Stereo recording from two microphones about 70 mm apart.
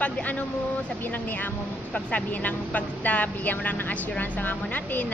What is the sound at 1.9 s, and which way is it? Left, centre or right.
Speech, left.